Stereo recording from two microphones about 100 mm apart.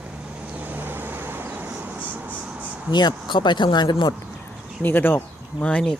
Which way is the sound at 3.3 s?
50° left (ahead or behind).